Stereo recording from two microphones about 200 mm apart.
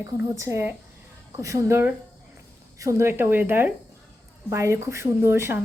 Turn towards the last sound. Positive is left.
turn(degrees=-10)  # may be behind; listen again after turning